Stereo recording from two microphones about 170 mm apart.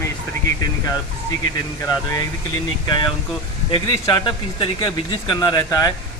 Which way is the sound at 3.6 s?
30° left (ahead or behind).